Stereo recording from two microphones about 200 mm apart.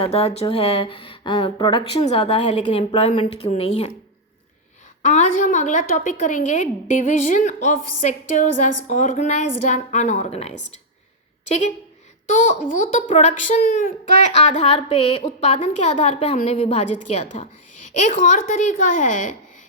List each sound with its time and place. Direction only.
0.0 s speech: 30° left (ahead or behind)
5.0 s a woman's voice: 35° left (ahead or behind)
13.1 s a woman's voice: 35° left (ahead or behind)